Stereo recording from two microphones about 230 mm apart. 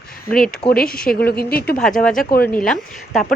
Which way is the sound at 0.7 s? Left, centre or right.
Left.